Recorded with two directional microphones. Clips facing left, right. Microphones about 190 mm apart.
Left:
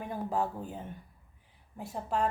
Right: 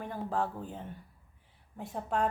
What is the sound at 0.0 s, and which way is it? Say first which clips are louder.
Speech: left 1 dB; 10° left (ahead or behind).